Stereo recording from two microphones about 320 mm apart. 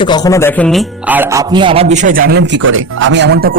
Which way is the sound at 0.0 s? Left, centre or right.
Centre.